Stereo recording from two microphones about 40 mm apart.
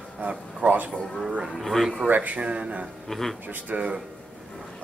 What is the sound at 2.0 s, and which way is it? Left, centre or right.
Speech, right.